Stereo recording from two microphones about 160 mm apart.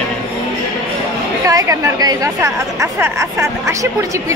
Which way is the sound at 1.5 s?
20° right (ahead or behind).